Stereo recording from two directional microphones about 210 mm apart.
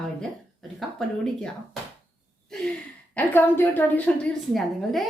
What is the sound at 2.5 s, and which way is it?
Gasp, centre (ahead or behind).